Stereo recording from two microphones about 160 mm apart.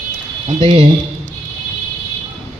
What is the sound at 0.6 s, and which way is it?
Speech, 35° right (ahead or behind).